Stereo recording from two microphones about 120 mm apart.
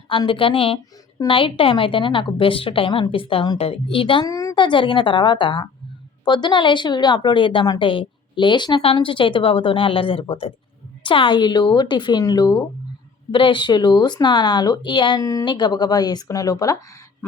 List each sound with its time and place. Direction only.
0.1 s a woman's voice: 45° left (ahead or behind)
4.3 s speech: 30° left (ahead or behind)
4.5 s a woman's voice: 40° left (ahead or behind)
15.3 s speech: 25° left (ahead or behind)
15.5 s a woman's voice: 40° left (ahead or behind)